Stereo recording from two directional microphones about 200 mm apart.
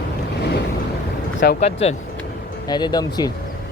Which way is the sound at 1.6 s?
30° left (ahead or behind).